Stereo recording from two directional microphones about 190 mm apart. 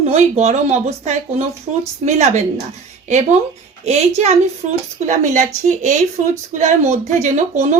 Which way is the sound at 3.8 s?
35° right (ahead or behind).